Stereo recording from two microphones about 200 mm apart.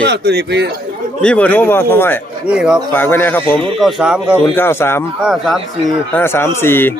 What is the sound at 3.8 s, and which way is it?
Speech, centre (ahead or behind).